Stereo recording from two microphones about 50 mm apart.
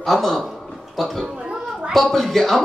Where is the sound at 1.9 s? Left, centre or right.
Centre.